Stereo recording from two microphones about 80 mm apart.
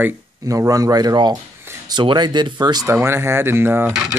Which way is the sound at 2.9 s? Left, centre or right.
Right.